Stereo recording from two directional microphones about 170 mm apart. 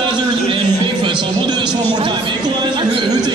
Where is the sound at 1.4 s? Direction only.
25° right (ahead or behind).